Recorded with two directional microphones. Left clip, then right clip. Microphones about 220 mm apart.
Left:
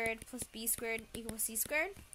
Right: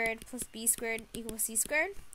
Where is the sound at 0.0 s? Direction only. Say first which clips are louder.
Right 4 dB; 30° right (ahead or behind).